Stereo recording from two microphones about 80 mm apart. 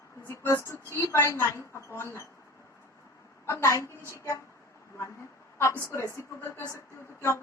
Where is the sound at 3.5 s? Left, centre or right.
Left.